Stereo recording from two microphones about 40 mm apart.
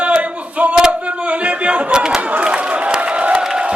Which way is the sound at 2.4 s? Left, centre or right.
Right.